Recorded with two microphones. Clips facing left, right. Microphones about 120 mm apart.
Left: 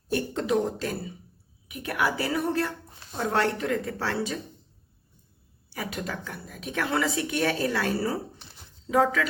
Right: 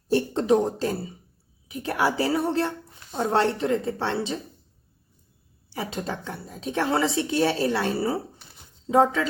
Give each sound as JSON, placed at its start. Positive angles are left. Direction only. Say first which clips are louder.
{"t": 0.1, "sound": "beatboxing", "louder": "right 5 dB", "side_deg": -30}
{"t": 1.6, "sound": "a woman's voice", "louder": "right 3 dB", "side_deg": -30}
{"t": 5.7, "sound": "a woman's voice", "louder": "right 3 dB", "side_deg": -25}